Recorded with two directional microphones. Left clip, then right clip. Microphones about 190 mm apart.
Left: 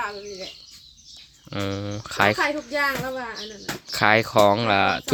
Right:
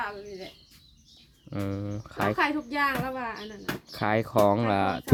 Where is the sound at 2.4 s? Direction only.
15° right (ahead or behind).